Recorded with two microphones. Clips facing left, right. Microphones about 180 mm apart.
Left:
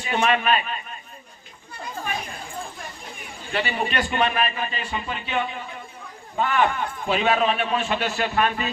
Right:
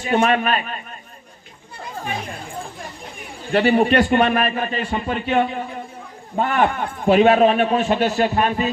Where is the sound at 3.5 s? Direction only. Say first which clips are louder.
Right 10 dB; 50° right (ahead or behind).